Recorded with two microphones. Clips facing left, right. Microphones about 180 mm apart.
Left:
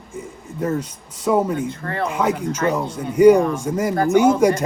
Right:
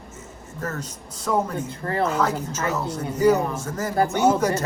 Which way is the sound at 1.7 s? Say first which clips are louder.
Right 1 dB; 30° right (ahead or behind).